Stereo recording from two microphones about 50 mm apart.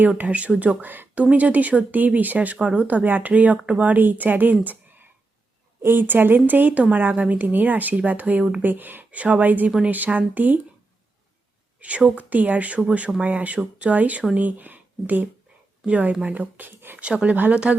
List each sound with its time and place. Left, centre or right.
0.2 s speech: right
11.8 s speech: right
17.0 s speech: right